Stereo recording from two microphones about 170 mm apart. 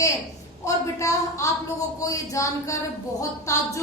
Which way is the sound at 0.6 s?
15° left (ahead or behind).